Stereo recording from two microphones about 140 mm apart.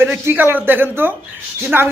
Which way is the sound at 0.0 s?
15° right (ahead or behind).